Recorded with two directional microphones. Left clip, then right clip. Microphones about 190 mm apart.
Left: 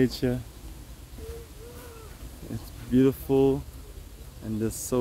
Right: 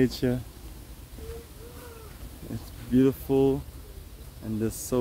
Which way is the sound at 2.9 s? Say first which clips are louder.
Left 1 dB; 10° left (ahead or behind).